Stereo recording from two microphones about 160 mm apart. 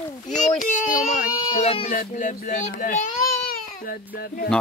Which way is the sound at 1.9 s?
55° left (ahead or behind).